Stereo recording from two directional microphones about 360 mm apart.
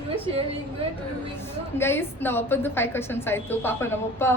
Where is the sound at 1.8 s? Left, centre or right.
Centre.